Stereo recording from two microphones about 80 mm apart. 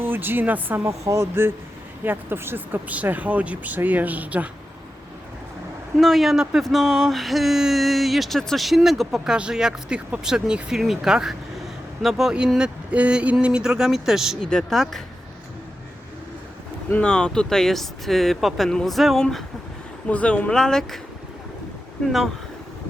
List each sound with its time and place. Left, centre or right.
0.0 s speech: right
0.9 s speech: right; by 4.4 s centre
6.0 s speech: centre
14.4 s speech: centre
17.0 s speech: centre
20.1 s speech: centre